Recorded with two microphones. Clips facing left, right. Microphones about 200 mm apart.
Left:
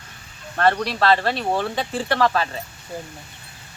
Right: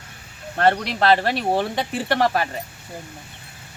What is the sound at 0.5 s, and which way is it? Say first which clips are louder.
Speech: right 1 dB; 25° right (ahead or behind).